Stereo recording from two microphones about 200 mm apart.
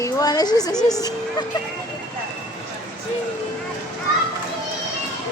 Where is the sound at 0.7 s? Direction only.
Centre (ahead or behind).